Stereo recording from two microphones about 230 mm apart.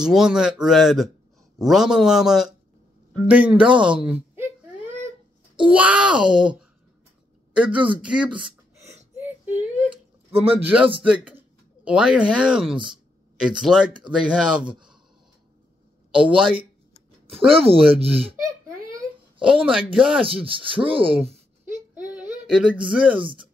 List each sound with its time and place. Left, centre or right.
0.0 s speech: centre
3.1 s baby cry: centre
5.7 s speech: centre
8.4 s a sound: centre
10.3 s speech: right
11.8 s a woman's voice: centre
16.1 s speech: centre
17.5 s speech: right
19.4 s speech: centre
22.5 s speech: centre